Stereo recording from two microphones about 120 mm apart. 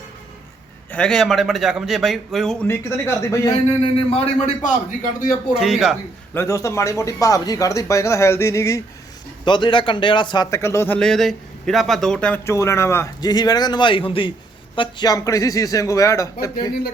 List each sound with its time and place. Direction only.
0.9 s a man's voice: 10° left (ahead or behind)
2.6 s speech: 20° left (ahead or behind)
4.1 s a man's voice: 70° left (ahead or behind)
5.5 s a man's voice: 5° right (ahead or behind)
6.3 s speech: 25° left (ahead or behind)
9.4 s speech: 40° left (ahead or behind)
10.5 s speech: 25° left (ahead or behind)
11.0 s a man's voice: 5° left (ahead or behind)
12.5 s speech: 25° left (ahead or behind)
13.3 s speech: 35° left (ahead or behind)
14.8 s speech: 35° left (ahead or behind)